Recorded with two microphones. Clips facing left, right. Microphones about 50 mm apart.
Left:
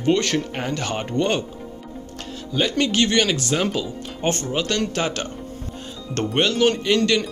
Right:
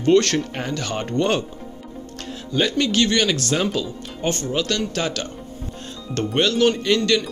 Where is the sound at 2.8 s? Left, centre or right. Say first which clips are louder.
Left 1 dB; left.